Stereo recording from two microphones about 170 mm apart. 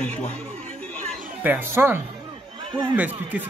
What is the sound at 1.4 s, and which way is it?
Speech, 10° right (ahead or behind).